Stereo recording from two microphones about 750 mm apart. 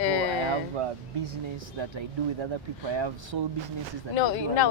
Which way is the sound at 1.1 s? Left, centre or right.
Right.